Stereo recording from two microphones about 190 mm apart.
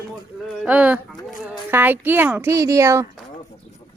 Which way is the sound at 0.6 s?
5° right (ahead or behind).